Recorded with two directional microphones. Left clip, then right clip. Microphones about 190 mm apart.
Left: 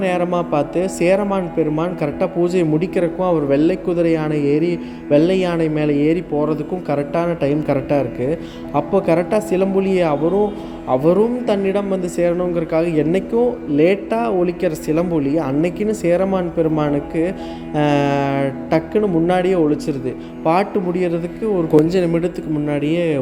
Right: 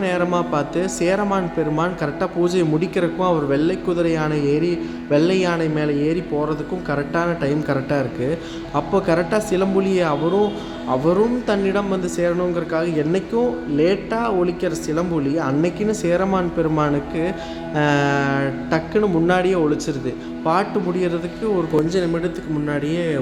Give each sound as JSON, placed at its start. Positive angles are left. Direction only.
{"t": 0.0, "sound": "a man's voice", "side_deg": 15}